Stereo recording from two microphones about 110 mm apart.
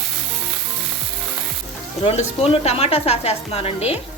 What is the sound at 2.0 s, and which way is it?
Speech, 60° left (ahead or behind).